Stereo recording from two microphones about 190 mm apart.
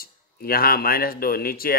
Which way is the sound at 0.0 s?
50° left (ahead or behind).